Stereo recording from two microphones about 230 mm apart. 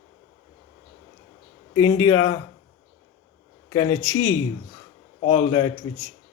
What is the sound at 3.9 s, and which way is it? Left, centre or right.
Speech, left.